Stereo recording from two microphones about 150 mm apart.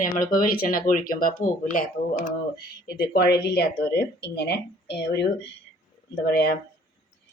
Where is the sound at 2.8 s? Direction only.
90° left.